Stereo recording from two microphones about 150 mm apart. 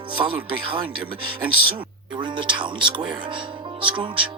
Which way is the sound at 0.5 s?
35° right (ahead or behind).